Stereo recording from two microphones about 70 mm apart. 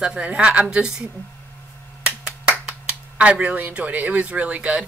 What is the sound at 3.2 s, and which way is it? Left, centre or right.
A woman's voice, centre.